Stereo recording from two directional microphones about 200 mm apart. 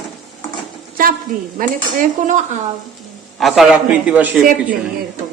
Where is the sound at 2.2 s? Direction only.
40° right (ahead or behind).